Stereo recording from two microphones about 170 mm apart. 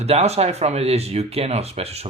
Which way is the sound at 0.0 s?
40° right (ahead or behind).